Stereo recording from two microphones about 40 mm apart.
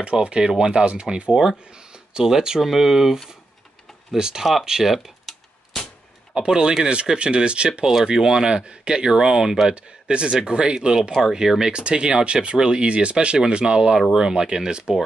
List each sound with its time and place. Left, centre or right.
0.0 s speech: right
0.4 s speech: centre
2.1 s speech: centre
5.2 s typewriter: centre
6.3 s speech: centre
7.9 s speech: centre
11.0 s speech: centre
11.7 s speech: right